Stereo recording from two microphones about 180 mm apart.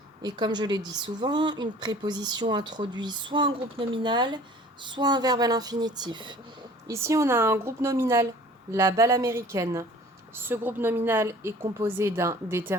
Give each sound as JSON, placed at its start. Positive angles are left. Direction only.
{"t": 0.2, "sound": "a woman's voice", "side_deg": -25}